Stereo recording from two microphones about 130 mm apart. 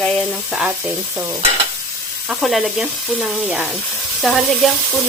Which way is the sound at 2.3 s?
Centre (ahead or behind).